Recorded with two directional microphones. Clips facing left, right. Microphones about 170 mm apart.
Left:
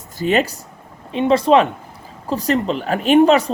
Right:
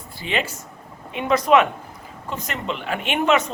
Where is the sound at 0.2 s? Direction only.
45° left (ahead or behind).